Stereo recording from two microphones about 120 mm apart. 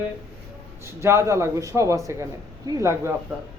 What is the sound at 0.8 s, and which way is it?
A man's voice, 25° right (ahead or behind).